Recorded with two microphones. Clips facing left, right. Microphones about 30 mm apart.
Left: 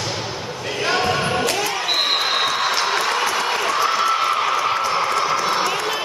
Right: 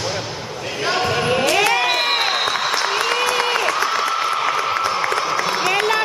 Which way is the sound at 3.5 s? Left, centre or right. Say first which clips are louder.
Right 1 dB; centre.